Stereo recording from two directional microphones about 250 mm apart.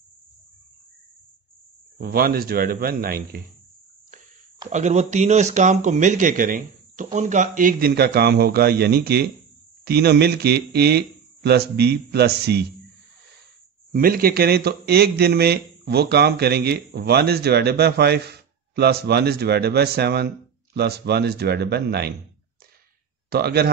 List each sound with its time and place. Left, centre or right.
2.0 s speech: right
4.6 s speech: right
13.9 s speech: right
23.3 s speech: right